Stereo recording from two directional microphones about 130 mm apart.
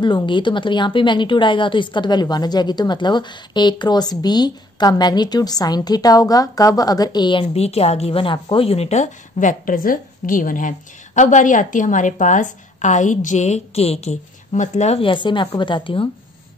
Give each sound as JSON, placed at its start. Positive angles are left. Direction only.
{"t": 0.0, "sound": "a woman's voice", "side_deg": 40}
{"t": 7.5, "sound": "a woman's voice", "side_deg": 50}
{"t": 11.1, "sound": "a woman's voice", "side_deg": 75}
{"t": 15.0, "sound": "a woman's voice", "side_deg": 40}